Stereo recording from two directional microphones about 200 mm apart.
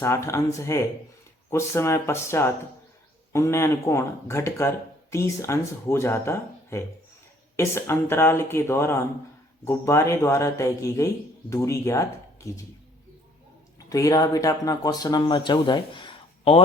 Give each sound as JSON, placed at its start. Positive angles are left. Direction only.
{"t": 0.0, "sound": "a man's voice", "side_deg": 15}
{"t": 13.7, "sound": "speech", "side_deg": 15}